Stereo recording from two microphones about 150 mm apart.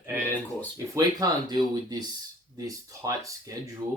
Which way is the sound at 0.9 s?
25° right (ahead or behind).